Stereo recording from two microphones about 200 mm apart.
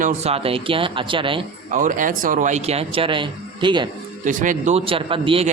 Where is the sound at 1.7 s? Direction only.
40° right (ahead or behind); by 3.8 s 25° right (ahead or behind).